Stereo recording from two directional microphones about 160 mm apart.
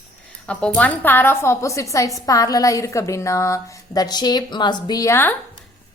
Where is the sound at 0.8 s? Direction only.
10° left (ahead or behind).